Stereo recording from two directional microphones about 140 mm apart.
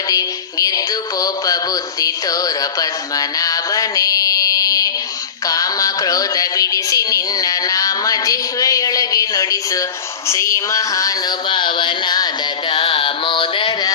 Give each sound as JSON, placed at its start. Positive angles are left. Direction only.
{"t": 0.1, "sound": "synthetic singing", "side_deg": 25}
{"t": 1.2, "sound": "music", "side_deg": 25}
{"t": 10.2, "sound": "a sound", "side_deg": 20}
{"t": 12.7, "sound": "music", "side_deg": 40}